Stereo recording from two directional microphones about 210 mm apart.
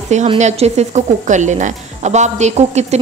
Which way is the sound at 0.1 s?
35° right (ahead or behind).